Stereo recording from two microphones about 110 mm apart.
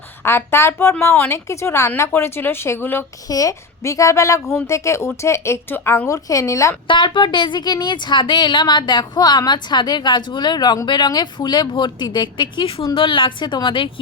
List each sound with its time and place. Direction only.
0.3 s speech: 25° left (ahead or behind)
3.2 s speech: 30° left (ahead or behind)
6.8 s a woman's voice: 50° left (ahead or behind)